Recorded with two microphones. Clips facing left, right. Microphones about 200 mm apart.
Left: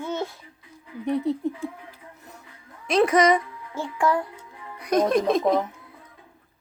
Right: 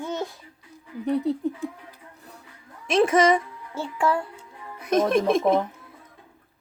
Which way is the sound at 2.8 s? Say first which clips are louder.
Even; 25° right (ahead or behind).